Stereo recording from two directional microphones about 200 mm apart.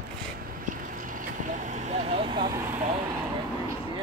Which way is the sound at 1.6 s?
35° right (ahead or behind).